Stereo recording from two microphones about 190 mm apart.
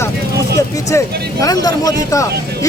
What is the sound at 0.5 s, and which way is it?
A man's voice, 15° left (ahead or behind).